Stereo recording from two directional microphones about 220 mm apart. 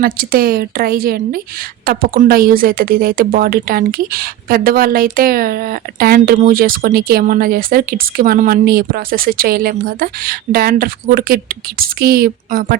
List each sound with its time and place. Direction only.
0.0 s a woman's voice: 40° right (ahead or behind)